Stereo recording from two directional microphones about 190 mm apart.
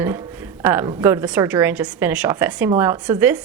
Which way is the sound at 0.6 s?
10° right (ahead or behind).